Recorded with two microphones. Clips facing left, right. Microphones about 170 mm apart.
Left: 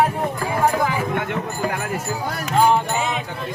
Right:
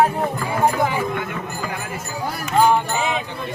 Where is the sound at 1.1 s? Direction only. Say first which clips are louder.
Left 3 dB; 65° left (ahead or behind).